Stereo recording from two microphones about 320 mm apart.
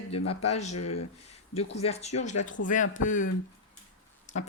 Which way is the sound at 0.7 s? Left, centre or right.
Left.